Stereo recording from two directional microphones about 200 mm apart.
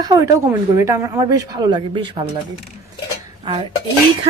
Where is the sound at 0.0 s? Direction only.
15° right (ahead or behind).